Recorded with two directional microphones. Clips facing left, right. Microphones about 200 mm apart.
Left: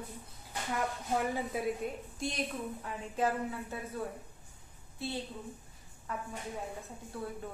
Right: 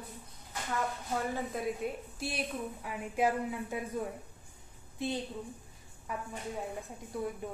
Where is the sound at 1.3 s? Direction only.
5° left (ahead or behind).